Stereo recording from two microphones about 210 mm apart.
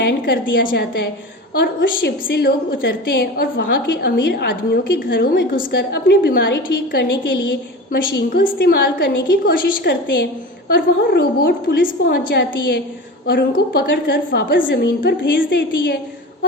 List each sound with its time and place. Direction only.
0.0 s a woman's voice: 50° left (ahead or behind)
14.7 s a woman's voice: 55° left (ahead or behind)